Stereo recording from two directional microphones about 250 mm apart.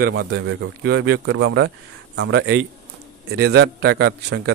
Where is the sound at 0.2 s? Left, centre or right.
Right.